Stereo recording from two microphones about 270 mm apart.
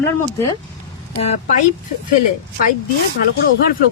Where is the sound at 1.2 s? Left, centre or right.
Left.